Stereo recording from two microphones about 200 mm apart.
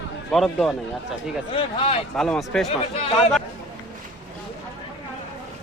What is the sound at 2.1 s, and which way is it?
Speech, 5° left (ahead or behind).